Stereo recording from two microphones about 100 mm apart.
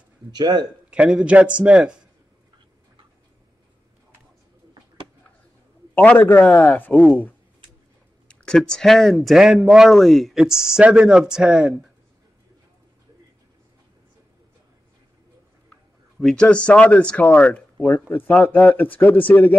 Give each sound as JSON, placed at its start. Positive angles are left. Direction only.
{"t": 0.3, "sound": "speech", "side_deg": -45}
{"t": 0.8, "sound": "a man's voice", "side_deg": -10}
{"t": 5.9, "sound": "speech", "side_deg": 20}
{"t": 6.9, "sound": "speech", "side_deg": 0}
{"t": 8.3, "sound": "speech", "side_deg": 5}
{"t": 16.2, "sound": "speech", "side_deg": 5}